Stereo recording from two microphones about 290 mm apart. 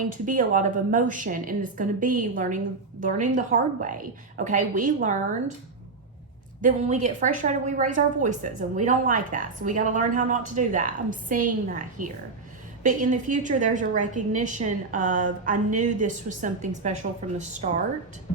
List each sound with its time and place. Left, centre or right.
0.3 s a woman's voice: right
6.6 s a woman's voice: right